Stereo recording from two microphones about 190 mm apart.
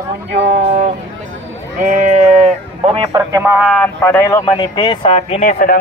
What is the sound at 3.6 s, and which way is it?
A man's voice, 5° left (ahead or behind).